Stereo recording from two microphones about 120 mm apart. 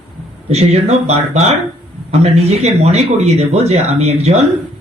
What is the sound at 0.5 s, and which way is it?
Speech, 60° right (ahead or behind).